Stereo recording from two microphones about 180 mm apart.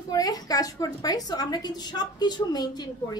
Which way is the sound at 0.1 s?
20° left (ahead or behind).